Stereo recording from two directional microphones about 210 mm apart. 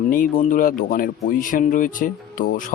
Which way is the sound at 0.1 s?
40° left (ahead or behind).